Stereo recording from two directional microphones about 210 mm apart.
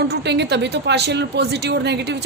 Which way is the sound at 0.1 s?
55° right (ahead or behind).